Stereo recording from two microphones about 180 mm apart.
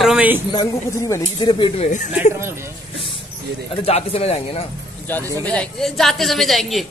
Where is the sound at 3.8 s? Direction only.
35° left (ahead or behind).